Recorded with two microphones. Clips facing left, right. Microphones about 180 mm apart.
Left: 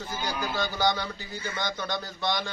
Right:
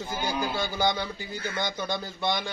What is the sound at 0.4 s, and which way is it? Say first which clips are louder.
A man's voice: left 1 dB; 10° right (ahead or behind).